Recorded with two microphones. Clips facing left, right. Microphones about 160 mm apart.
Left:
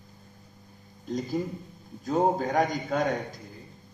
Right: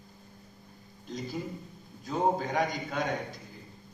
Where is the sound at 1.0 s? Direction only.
45° left (ahead or behind).